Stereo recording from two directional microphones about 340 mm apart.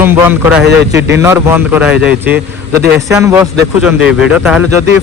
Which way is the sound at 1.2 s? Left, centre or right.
Centre.